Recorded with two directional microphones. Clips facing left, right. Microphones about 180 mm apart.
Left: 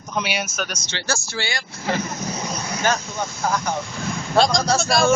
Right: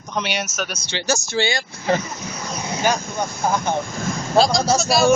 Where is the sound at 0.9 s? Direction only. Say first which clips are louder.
Right 4 dB; 15° right (ahead or behind).